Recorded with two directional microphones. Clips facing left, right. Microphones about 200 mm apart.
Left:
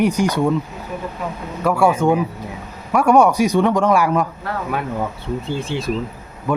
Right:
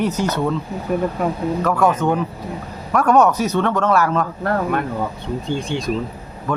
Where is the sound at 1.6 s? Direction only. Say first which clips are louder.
Left 3 dB; 10° left (ahead or behind).